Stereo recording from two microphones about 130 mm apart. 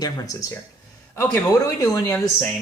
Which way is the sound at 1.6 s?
25° left (ahead or behind).